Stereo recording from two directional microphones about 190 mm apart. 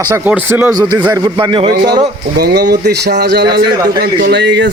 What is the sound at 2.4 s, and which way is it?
Speech, 60° right (ahead or behind).